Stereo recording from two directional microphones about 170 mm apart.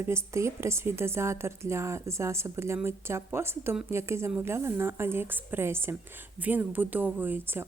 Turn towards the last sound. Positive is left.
turn(degrees=-10)  # may be behind; listen again after turning